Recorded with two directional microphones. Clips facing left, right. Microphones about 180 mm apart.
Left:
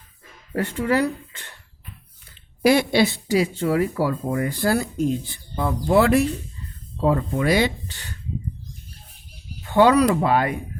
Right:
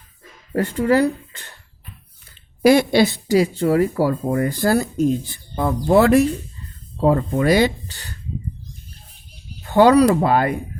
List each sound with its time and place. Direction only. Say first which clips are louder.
0.5 s speech: right 4 dB; 35° right (ahead or behind)
2.6 s speech: right 4 dB; 45° right (ahead or behind)
9.6 s speech: right 3 dB; 40° right (ahead or behind)